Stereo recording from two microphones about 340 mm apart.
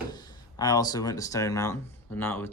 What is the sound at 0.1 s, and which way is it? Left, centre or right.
Speech, centre.